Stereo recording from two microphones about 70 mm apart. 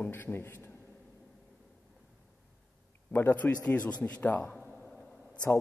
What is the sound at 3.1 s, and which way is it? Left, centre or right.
Speech, left.